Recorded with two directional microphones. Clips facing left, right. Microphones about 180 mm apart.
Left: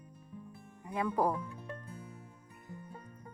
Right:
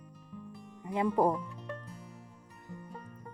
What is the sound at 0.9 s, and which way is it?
Speech, 20° right (ahead or behind).